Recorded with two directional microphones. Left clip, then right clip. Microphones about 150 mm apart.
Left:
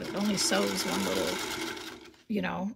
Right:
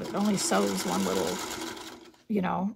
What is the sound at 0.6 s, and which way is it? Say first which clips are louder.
Speech: right 1 dB; 5° right (ahead or behind).